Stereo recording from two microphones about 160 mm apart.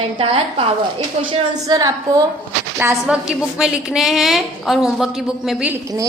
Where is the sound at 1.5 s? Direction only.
25° right (ahead or behind).